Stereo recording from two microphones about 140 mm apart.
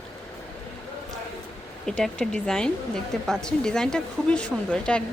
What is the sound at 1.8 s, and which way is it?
A woman's voice, 5° left (ahead or behind).